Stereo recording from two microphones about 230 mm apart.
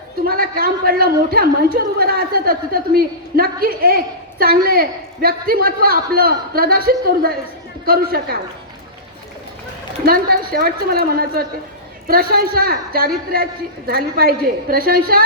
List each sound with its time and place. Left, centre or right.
0.3 s a man's voice: right
10.1 s a man's voice: right